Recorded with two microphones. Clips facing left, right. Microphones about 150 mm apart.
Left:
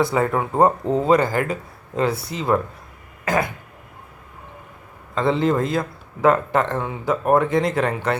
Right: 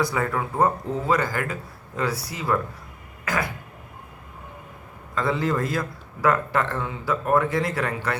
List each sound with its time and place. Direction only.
0.0 s speech: 25° left (ahead or behind)
3.2 s throat clearing: 50° left (ahead or behind)
5.1 s speech: 25° left (ahead or behind)